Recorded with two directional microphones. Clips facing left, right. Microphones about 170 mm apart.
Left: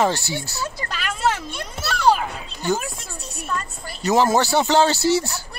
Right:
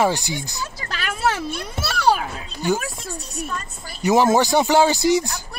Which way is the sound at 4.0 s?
15° right (ahead or behind).